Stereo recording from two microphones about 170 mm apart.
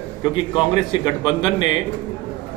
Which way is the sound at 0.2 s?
25° left (ahead or behind).